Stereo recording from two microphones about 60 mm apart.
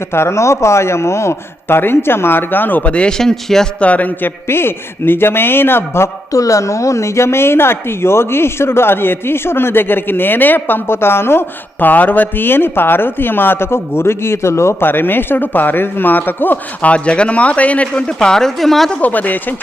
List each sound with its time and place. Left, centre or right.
0.1 s speech: left; by 3.7 s centre
3.8 s speech: left
4.4 s speech: left
6.3 s speech: left
16.9 s speech: centre
18.9 s speech: left